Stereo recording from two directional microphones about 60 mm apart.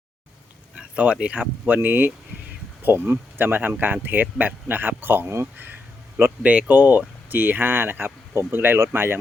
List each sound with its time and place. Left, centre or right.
0.8 s speech: centre; by 5.6 s right
6.4 s speech: right